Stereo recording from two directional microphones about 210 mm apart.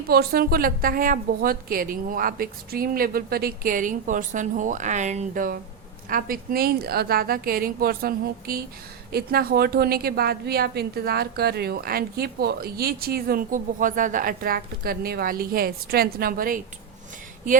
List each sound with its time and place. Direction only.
0.1 s a woman's voice: 45° right (ahead or behind)